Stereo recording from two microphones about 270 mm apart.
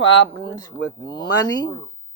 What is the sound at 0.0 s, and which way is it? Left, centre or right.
A man's voice, centre.